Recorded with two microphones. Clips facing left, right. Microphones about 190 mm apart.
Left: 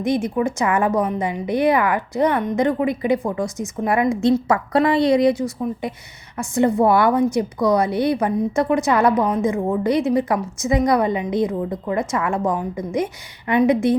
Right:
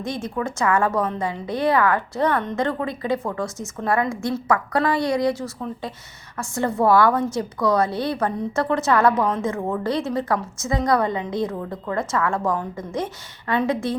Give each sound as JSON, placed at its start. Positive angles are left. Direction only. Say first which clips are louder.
{"t": 0.0, "sound": "a woman's voice", "louder": "left 7 dB", "side_deg": 20}